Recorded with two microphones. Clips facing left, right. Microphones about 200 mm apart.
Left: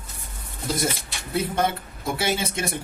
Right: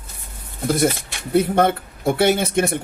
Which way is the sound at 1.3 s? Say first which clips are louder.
Right 8 dB; 60° right (ahead or behind).